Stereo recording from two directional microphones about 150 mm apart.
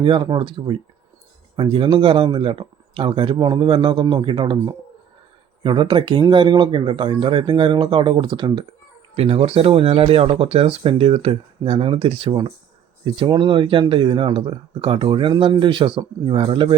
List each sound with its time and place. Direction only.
0.0 s speech: 35° right (ahead or behind)